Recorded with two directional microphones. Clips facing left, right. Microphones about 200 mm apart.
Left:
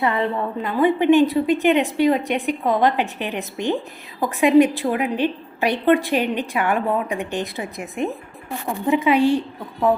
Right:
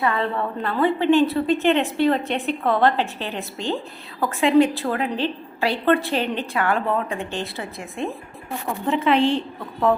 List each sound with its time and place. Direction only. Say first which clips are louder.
0.0 s a woman's voice: left 2 dB; 20° left (ahead or behind)